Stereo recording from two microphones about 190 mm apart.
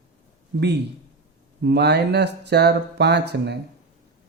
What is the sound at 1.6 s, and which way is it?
Speech, 60° right (ahead or behind).